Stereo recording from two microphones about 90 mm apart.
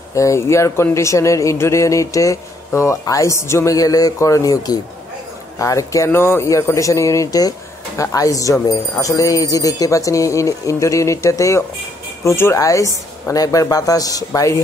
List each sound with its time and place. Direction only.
0.1 s speech: 35° left (ahead or behind)
6.4 s speech: 35° left (ahead or behind)